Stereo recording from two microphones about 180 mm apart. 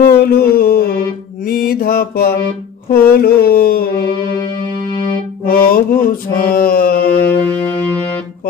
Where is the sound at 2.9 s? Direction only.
55° left (ahead or behind).